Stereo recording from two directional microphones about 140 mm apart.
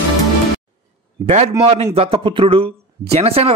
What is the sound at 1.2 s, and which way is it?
Speech, 50° right (ahead or behind).